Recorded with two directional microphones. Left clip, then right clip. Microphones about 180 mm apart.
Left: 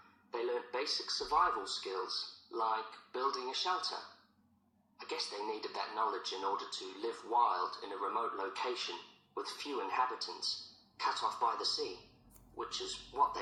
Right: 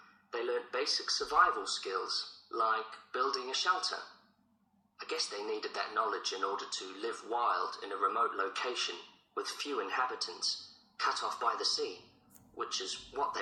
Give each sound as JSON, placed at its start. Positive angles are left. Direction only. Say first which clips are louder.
{"t": 0.3, "sound": "speech", "louder": "right 2 dB", "side_deg": -35}
{"t": 4.9, "sound": "a man's voice", "louder": "right 3 dB", "side_deg": -35}